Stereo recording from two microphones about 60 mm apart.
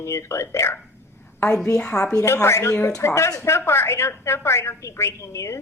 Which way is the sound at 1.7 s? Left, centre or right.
Centre.